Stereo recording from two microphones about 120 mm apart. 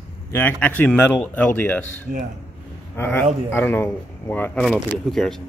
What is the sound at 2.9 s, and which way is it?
Speech, 20° left (ahead or behind).